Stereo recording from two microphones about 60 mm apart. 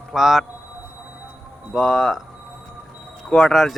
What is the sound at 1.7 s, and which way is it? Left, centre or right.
Speech, centre.